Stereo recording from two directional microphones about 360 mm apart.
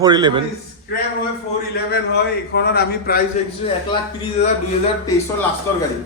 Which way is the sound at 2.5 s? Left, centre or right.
Left.